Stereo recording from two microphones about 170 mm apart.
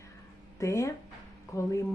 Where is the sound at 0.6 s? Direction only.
15° left (ahead or behind).